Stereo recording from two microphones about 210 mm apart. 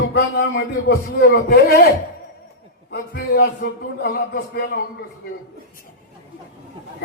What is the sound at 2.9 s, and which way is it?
A man's voice, 50° left (ahead or behind).